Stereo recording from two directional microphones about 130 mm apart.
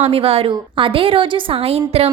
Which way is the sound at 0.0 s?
50° right (ahead or behind).